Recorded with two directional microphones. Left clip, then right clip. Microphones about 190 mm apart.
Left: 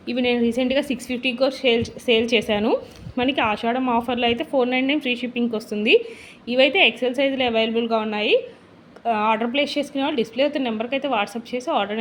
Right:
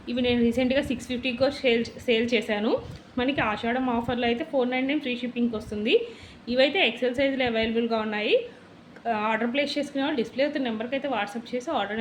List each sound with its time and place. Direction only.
0.0 s a woman's voice: 30° left (ahead or behind)